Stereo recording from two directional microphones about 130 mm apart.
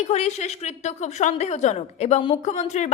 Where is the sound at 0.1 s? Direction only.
55° left (ahead or behind).